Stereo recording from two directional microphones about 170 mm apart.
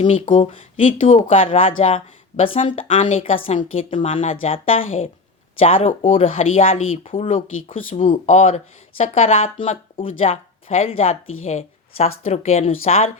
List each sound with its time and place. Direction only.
0.0 s speech: 30° left (ahead or behind)